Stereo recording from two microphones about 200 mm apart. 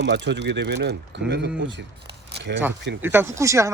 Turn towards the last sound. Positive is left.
turn(degrees=-15)  # may be behind; listen again after turning